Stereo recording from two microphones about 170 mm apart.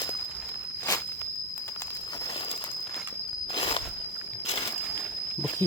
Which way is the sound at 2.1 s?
25° left (ahead or behind).